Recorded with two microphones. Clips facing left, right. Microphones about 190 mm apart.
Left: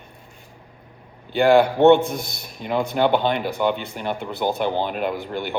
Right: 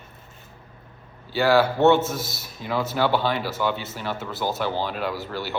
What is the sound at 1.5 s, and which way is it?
Speech, 15° left (ahead or behind).